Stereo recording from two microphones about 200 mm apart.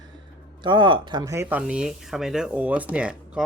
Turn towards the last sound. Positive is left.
turn(degrees=-5)  # may be behind; listen again after turning